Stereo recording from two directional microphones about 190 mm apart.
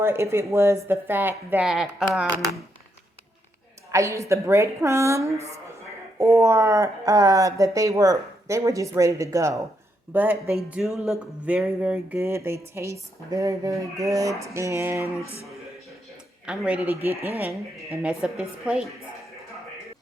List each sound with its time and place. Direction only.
0.0 s speech: 15° right (ahead or behind)
3.9 s speech: 15° right (ahead or behind)
16.5 s a woman's voice: 5° right (ahead or behind)